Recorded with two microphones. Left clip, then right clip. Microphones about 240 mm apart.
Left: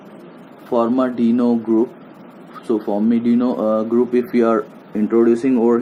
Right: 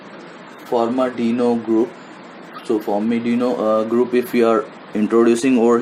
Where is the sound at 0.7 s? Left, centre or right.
Centre.